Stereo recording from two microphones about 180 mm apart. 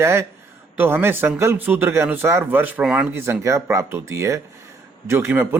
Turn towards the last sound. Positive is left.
turn(degrees=-10)  # may be behind; listen again after turning